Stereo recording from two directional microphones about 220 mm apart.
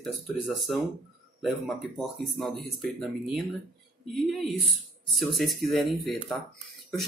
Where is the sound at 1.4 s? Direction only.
Centre (ahead or behind).